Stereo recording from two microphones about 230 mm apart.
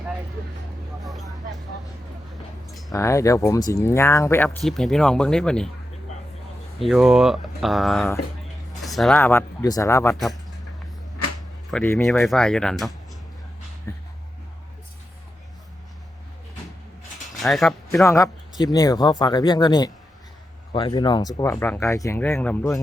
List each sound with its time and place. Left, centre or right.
1.0 s a sound: centre
2.9 s speech: centre
6.7 s speech: centre
11.7 s speech: centre
13.9 s speech: centre
17.3 s speech: centre
18.0 s speech: centre